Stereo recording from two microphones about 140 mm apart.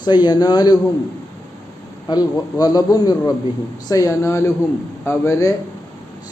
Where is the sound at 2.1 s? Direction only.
30° left (ahead or behind).